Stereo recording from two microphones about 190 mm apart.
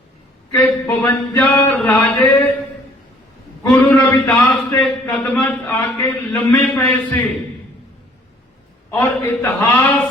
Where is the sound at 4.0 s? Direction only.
5° left (ahead or behind).